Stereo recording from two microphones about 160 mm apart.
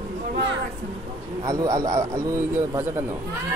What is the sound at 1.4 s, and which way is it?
A man's voice, 20° right (ahead or behind).